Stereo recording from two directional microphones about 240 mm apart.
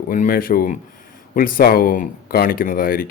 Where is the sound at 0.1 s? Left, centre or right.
Left.